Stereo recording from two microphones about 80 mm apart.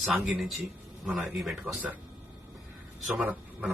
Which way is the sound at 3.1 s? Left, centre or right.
Centre.